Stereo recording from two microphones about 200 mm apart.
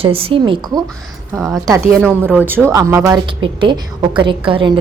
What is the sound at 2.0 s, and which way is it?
A woman's voice, 10° right (ahead or behind).